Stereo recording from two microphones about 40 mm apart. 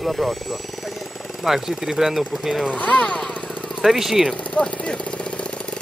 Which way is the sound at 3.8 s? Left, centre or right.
Centre.